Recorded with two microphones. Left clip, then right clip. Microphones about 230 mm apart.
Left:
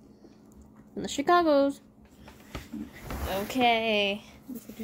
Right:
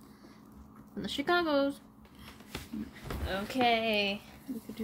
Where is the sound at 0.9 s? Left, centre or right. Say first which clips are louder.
Left 6 dB; centre.